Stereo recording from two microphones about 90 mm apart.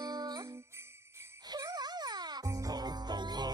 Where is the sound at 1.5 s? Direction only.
50° right (ahead or behind).